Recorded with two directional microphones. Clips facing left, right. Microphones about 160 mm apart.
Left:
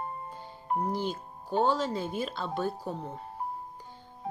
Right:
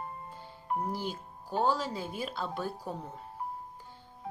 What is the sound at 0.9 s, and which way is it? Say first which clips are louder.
Speech: left 4 dB; 5° right (ahead or behind).